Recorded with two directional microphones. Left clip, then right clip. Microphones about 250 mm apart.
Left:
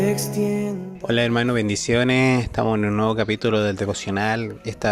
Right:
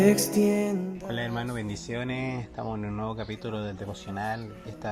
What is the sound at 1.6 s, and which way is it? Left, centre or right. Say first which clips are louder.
Speech: left 14 dB; left.